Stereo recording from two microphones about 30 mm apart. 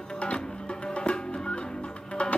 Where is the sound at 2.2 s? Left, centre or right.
Left.